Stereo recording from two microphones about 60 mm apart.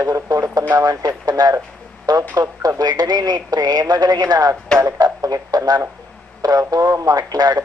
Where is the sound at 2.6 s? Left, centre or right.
Right.